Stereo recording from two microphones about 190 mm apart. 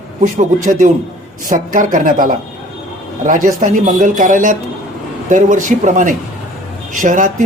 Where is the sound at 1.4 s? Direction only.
45° right (ahead or behind).